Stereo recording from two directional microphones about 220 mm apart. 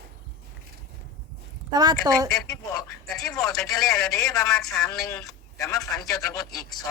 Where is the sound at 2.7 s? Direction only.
15° left (ahead or behind).